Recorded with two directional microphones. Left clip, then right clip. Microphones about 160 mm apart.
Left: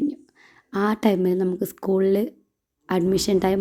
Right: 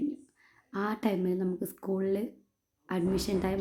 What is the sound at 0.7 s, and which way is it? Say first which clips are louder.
A woman's voice: left 10 dB; 25° left (ahead or behind).